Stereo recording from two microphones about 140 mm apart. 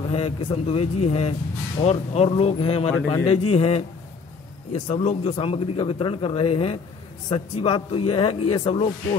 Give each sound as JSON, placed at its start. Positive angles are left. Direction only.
{"t": 0.1, "sound": "a man's voice", "side_deg": 45}
{"t": 4.8, "sound": "a man's voice", "side_deg": 50}